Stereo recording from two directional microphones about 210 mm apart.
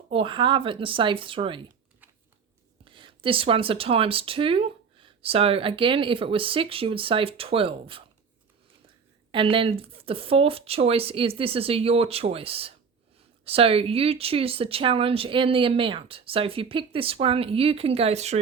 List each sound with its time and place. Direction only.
0.1 s speech: 25° right (ahead or behind)
2.8 s speech: 25° right (ahead or behind)
9.3 s speech: 25° right (ahead or behind)